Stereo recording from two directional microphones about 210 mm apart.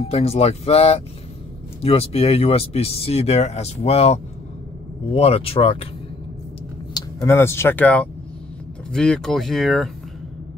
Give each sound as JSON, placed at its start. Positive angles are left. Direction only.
{"t": 0.0, "sound": "speech", "side_deg": 30}
{"t": 6.9, "sound": "speech", "side_deg": 15}